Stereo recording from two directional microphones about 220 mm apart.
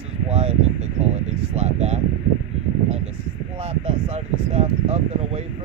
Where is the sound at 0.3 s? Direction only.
30° right (ahead or behind).